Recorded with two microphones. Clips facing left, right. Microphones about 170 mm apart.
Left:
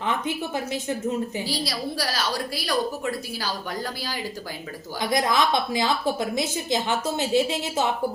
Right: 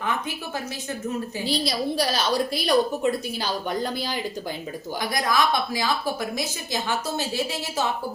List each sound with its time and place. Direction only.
0.0 s a woman's voice: 20° left (ahead or behind)
1.5 s a woman's voice: 20° right (ahead or behind)
4.9 s a woman's voice: 20° left (ahead or behind)